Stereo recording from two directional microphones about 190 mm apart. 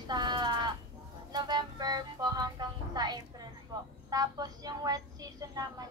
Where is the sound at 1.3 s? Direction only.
20° right (ahead or behind).